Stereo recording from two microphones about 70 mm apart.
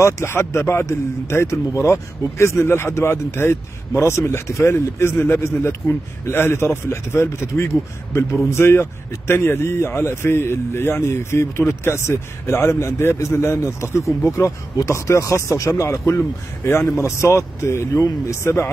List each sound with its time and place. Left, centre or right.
0.0 s a man's voice: left